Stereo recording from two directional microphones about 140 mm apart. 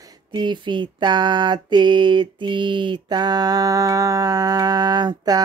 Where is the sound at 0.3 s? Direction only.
35° right (ahead or behind).